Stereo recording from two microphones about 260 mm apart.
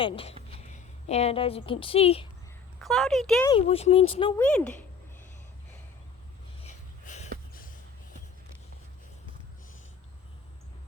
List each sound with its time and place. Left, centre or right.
0.0 s a woman's voice: left
2.7 s speech: centre
3.4 s speech: left
4.4 s speech: centre
7.0 s a sound: left